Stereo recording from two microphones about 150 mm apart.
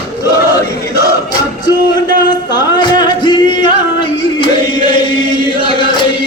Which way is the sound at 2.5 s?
30° left (ahead or behind).